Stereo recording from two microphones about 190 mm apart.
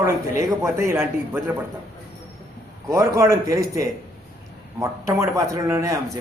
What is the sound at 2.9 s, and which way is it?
A man's voice, 15° right (ahead or behind).